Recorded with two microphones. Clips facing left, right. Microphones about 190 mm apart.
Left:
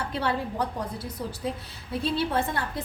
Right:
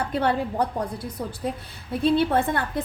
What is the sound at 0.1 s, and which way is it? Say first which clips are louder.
Speech: right 5 dB; 50° right (ahead or behind).